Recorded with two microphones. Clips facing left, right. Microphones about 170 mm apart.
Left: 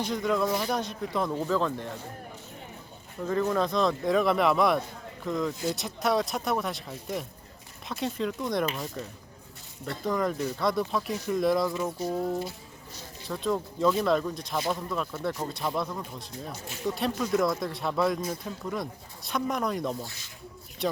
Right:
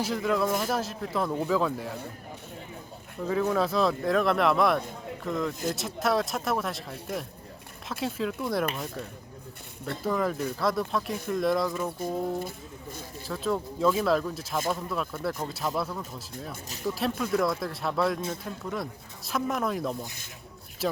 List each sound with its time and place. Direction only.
0.0 s speech: 5° right (ahead or behind)
3.2 s speech: centre (ahead or behind)
12.5 s a sound: 50° right (ahead or behind)
13.2 s speech: centre (ahead or behind)